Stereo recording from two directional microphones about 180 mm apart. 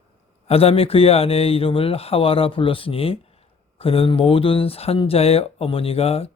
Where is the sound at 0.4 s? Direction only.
35° left (ahead or behind).